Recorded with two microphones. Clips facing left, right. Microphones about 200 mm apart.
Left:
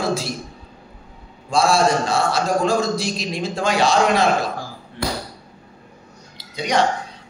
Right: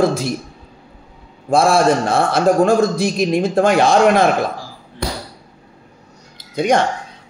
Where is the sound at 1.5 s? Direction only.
55° right (ahead or behind).